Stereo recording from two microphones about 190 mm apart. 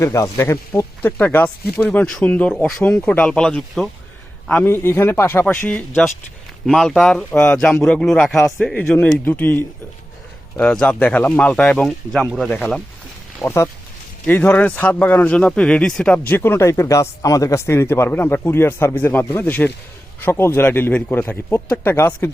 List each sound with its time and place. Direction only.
0.0 s speech: 15° left (ahead or behind)
13.4 s speech: 15° left (ahead or behind)